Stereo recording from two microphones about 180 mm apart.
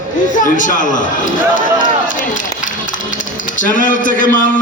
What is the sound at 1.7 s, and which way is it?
Run, 45° left (ahead or behind).